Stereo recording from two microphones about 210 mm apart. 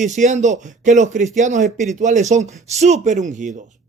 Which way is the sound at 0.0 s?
35° right (ahead or behind).